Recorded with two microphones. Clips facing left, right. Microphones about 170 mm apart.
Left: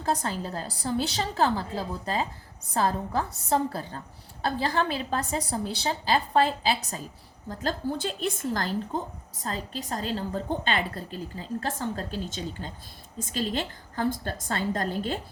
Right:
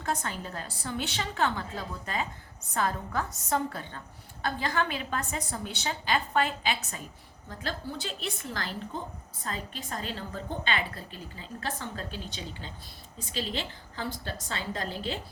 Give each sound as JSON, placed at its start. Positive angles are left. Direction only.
{"t": 0.0, "sound": "a woman's voice", "side_deg": 35}